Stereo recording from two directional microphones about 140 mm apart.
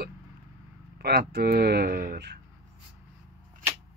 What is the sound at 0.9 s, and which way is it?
Speech, 90° right.